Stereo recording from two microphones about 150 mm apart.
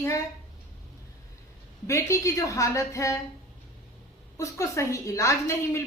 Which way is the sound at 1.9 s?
20° left (ahead or behind).